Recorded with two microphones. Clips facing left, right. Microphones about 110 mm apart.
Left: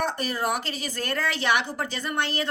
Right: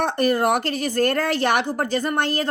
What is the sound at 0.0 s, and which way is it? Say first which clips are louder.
A woman's voice: right 7 dB; 55° right (ahead or behind).